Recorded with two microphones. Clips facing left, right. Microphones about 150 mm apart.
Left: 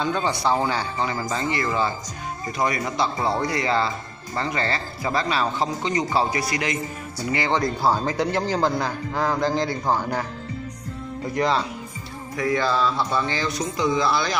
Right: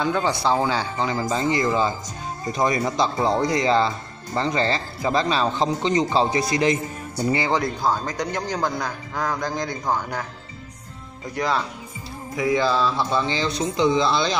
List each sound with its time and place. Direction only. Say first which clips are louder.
0.6 s speech: right 1 dB; 15° right (ahead or behind)
7.4 s speech: even; 5° right (ahead or behind)
7.8 s a man's voice: left 2 dB; 5° left (ahead or behind)
11.2 s a man's voice: left 2 dB; centre (ahead or behind)
12.4 s speech: right 2 dB; 15° right (ahead or behind)